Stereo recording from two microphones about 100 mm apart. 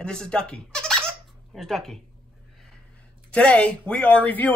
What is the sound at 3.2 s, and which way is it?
A man's voice, 10° left (ahead or behind).